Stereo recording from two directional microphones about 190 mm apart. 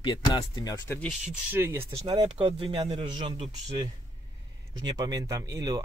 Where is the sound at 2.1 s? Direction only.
25° right (ahead or behind).